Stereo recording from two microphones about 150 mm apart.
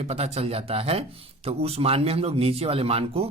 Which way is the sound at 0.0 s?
45° right (ahead or behind).